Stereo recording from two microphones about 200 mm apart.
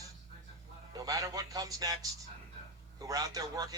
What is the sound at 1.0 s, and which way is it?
Speech, 15° right (ahead or behind).